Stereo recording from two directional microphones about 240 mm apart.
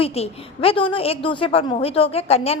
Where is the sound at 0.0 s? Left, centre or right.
Left.